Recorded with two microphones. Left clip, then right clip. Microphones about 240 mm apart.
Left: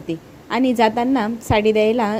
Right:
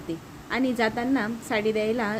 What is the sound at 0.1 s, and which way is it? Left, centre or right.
A woman's voice, left.